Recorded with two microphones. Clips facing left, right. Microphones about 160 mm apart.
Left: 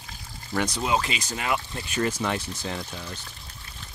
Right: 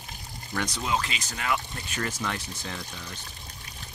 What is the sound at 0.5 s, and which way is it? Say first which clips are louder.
Speech: left 4 dB; 20° left (ahead or behind).